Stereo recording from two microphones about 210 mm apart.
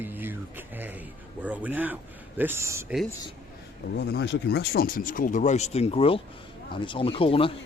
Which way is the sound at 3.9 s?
55° left (ahead or behind).